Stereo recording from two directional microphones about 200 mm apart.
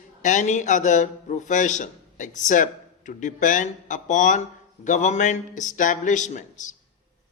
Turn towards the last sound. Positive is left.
turn(degrees=40)  # may be behind; listen again after turning